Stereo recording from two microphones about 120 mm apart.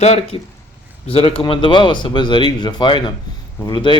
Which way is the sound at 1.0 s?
50° left (ahead or behind).